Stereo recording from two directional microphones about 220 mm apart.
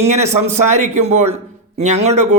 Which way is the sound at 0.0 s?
30° right (ahead or behind).